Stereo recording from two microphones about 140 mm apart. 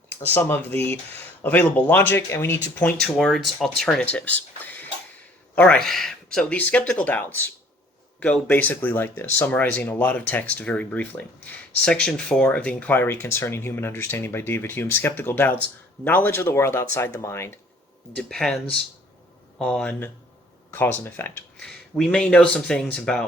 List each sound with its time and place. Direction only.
0.1 s speech: 15° left (ahead or behind)
3.2 s speech: centre (ahead or behind); by 17.5 s 20° left (ahead or behind)
18.2 s speech: 5° left (ahead or behind)
21.7 s speech: 5° left (ahead or behind)